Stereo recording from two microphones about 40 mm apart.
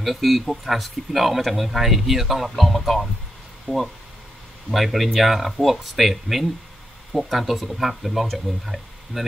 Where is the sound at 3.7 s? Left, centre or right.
Left.